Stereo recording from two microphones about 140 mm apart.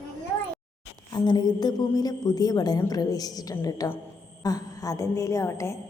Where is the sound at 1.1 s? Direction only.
30° left (ahead or behind).